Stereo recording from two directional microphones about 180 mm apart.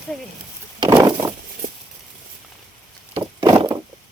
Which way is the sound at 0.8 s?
20° right (ahead or behind).